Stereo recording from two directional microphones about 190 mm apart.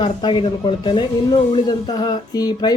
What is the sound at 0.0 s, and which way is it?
Speech, 25° left (ahead or behind).